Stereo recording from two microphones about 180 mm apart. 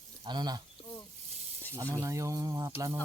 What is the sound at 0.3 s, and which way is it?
Speech, 25° right (ahead or behind).